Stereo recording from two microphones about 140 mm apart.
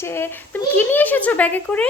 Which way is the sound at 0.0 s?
15° left (ahead or behind).